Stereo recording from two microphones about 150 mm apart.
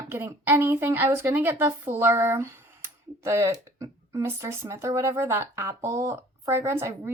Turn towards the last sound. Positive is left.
turn(degrees=-20)  # may be behind; listen again after turning